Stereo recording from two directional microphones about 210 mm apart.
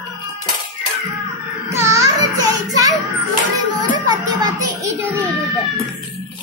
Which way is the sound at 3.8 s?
20° right (ahead or behind).